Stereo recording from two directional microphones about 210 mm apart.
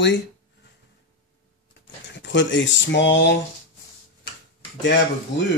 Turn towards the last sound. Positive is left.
turn(degrees=55)  # may be behind; listen again after turning